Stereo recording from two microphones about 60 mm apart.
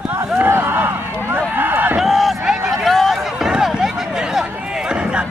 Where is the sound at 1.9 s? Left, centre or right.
Centre.